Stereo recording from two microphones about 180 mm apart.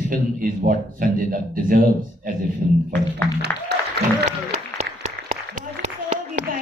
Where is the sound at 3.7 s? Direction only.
70° right (ahead or behind).